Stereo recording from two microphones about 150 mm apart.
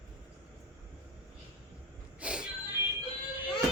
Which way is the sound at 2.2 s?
5° right (ahead or behind).